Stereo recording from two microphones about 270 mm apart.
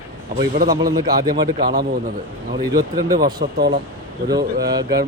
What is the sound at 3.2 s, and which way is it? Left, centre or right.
Speech, right.